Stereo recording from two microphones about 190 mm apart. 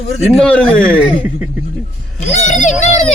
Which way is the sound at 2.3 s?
40° left (ahead or behind).